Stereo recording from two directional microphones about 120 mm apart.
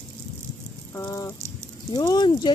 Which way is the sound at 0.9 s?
30° left (ahead or behind).